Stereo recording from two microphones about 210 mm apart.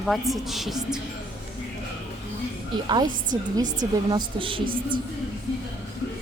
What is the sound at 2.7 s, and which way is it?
A woman's voice, 20° right (ahead or behind).